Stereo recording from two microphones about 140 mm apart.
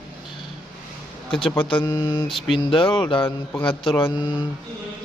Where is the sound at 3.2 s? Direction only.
15° left (ahead or behind).